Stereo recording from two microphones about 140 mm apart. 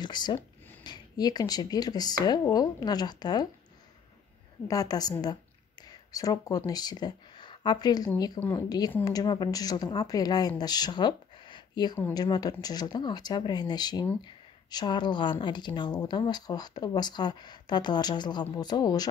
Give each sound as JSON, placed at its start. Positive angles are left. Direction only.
{"t": 0.0, "sound": "speech", "side_deg": 30}
{"t": 4.6, "sound": "speech", "side_deg": 25}